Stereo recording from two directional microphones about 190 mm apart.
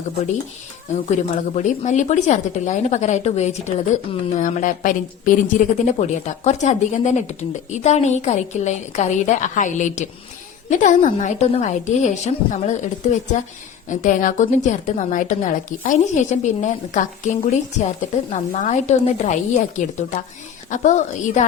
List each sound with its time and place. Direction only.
1.0 s a woman's voice: 40° left (ahead or behind)